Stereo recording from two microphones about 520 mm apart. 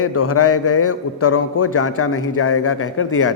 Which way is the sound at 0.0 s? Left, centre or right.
Left.